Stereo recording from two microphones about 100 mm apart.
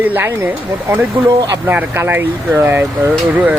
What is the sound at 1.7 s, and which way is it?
Speech, 20° right (ahead or behind).